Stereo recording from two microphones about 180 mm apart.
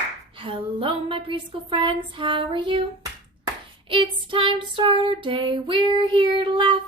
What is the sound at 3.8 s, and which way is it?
Child singing, 30° right (ahead or behind).